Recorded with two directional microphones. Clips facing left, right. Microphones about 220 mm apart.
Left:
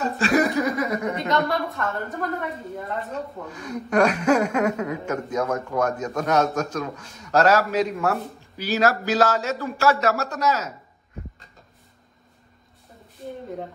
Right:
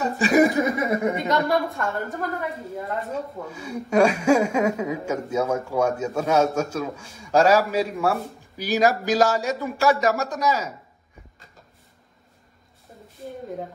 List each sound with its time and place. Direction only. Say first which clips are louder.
0.7 s chuckle: right 1 dB; 25° right (ahead or behind)
1.0 s a woman's voice: right 1 dB; centre (ahead or behind)